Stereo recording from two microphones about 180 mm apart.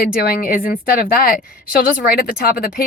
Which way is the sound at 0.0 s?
55° left (ahead or behind).